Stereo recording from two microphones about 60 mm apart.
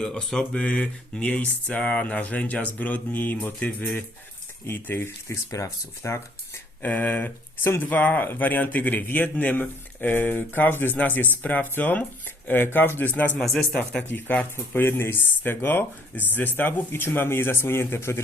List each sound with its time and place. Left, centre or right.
0.0 s speech: centre; by 5.1 s left
5.3 s speech: left
6.0 s speech: left
6.8 s speech: left
13.4 s speech: centre
14.1 s speech: left
15.1 s speech: left